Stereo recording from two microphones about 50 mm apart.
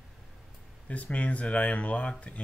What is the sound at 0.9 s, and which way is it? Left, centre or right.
Speech, left.